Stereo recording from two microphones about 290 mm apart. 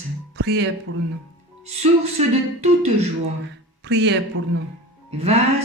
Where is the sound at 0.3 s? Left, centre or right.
Right.